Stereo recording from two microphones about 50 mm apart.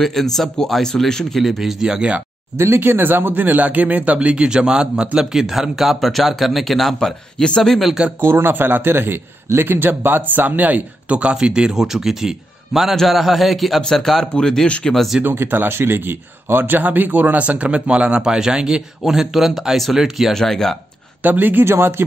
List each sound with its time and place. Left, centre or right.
0.0 s speech: centre
1.4 s speech: centre
2.5 s speech: right; by 7.9 s centre
8.2 s speech: right; by 15.0 s centre
15.2 s speech: right; by 20.3 s centre
20.3 s speech: centre
21.2 s speech: right
21.6 s speech: right